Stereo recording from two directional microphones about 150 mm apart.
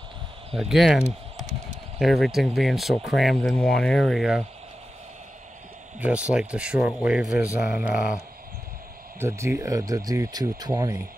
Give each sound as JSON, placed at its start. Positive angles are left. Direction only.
{"t": 0.5, "sound": "speech", "side_deg": 0}
{"t": 5.9, "sound": "speech", "side_deg": -10}
{"t": 9.2, "sound": "speech", "side_deg": -15}